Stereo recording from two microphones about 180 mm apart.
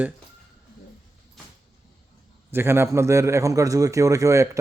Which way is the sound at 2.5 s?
15° right (ahead or behind).